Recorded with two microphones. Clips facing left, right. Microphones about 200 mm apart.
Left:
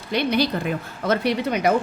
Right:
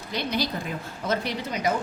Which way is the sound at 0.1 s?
65° left (ahead or behind).